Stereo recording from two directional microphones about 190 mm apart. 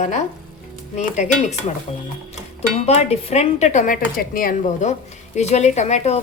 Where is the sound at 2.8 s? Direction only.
35° left (ahead or behind).